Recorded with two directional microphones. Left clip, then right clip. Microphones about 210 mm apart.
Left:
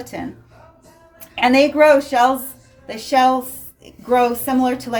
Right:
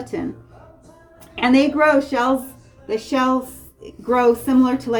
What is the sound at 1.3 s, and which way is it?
Speech, 45° left (ahead or behind).